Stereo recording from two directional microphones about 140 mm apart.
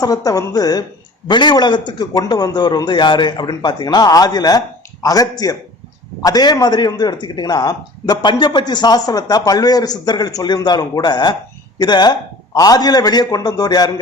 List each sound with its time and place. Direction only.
0.0 s a man's voice: 25° left (ahead or behind)